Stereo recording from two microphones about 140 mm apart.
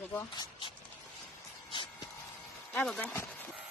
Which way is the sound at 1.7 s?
35° left (ahead or behind).